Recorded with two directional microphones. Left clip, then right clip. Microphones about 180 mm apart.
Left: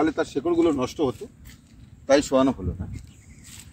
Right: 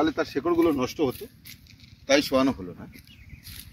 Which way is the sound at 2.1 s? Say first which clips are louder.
Left 2 dB; 45° left (ahead or behind).